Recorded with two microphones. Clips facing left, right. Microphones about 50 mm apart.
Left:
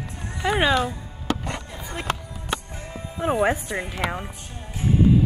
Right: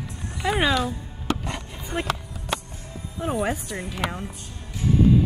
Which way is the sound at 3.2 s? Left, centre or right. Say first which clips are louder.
Left 4 dB; left.